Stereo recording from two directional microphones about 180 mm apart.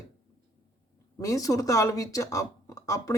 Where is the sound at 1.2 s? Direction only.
20° left (ahead or behind).